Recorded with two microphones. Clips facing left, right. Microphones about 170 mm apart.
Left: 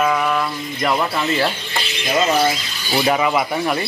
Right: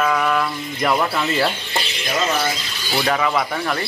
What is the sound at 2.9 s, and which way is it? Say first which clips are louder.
Speech: left 2 dB; 10° left (ahead or behind).